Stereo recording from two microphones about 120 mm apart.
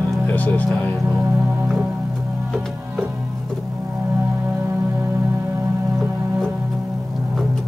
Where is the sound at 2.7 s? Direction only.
10° right (ahead or behind).